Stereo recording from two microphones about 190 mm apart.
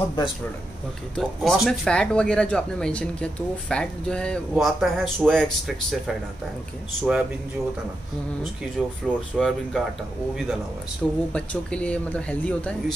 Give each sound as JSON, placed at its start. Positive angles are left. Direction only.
{"t": 1.1, "sound": "speech", "side_deg": 0}
{"t": 9.0, "sound": "speech", "side_deg": 0}
{"t": 11.0, "sound": "speech", "side_deg": 0}